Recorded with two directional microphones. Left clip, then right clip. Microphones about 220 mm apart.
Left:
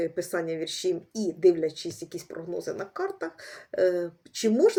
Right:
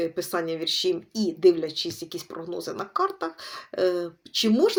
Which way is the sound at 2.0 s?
45° right (ahead or behind).